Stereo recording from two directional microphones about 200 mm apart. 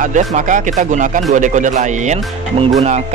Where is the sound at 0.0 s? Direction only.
40° right (ahead or behind).